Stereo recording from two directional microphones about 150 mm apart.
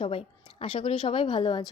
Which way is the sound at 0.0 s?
35° left (ahead or behind).